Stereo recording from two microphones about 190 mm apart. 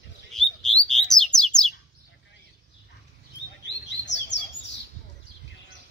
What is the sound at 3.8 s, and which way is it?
Bird, 70° left (ahead or behind).